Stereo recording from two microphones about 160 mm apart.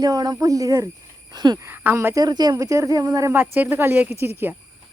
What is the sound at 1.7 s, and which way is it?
Speech, 15° right (ahead or behind).